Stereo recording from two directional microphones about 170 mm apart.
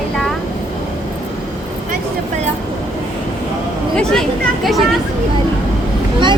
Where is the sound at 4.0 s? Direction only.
5° left (ahead or behind).